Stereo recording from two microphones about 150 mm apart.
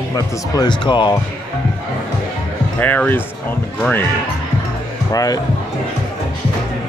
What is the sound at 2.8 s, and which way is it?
Speech, 10° left (ahead or behind).